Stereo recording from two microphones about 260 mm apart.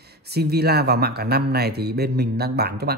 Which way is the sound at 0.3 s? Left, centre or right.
Right.